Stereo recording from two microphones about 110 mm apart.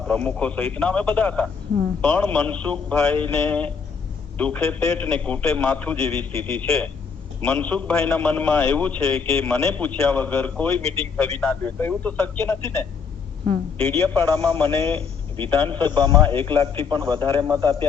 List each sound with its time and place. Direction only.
0.1 s a man's voice: 10° left (ahead or behind)
15.5 s a man's voice: 50° right (ahead or behind)
17.2 s a man's voice: 20° left (ahead or behind)
17.5 s a man's voice: 40° right (ahead or behind)